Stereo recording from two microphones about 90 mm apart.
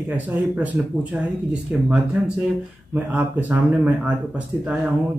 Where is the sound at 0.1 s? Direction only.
20° right (ahead or behind).